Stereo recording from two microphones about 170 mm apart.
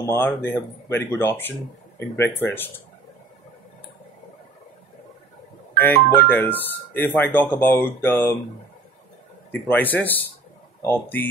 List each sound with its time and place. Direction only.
0.0 s speech: 15° left (ahead or behind)
5.8 s speech: 10° left (ahead or behind)
9.5 s speech: 10° left (ahead or behind)